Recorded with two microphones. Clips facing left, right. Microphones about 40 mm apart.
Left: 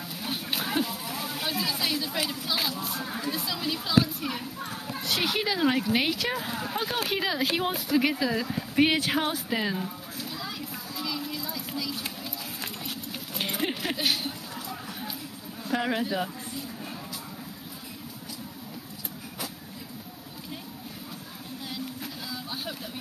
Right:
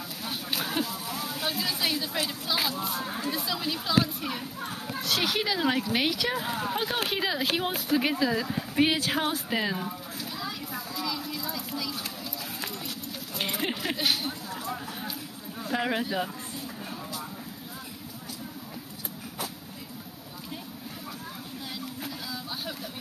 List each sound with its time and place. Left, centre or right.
0.2 s a sound: centre
1.4 s speech: centre
3.0 s speech: right
3.3 s speech: centre
6.7 s speech: centre
9.1 s a sound: centre
12.4 s run: centre
13.4 s a sound: centre
15.7 s speech: centre
21.6 s boat: centre